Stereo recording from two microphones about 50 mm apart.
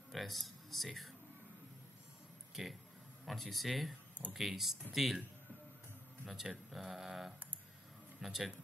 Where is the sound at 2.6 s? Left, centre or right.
Right.